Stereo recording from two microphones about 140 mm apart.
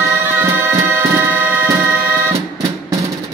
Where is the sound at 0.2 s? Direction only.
15° right (ahead or behind).